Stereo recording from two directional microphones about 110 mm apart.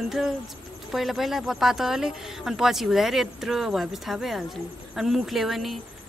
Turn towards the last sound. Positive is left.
turn(degrees=0)  # may be behind; listen again after turning